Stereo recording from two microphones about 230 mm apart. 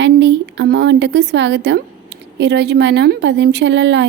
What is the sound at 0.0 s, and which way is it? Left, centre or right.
A woman's voice, right.